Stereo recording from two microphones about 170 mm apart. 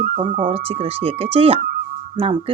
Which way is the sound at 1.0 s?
35° right (ahead or behind).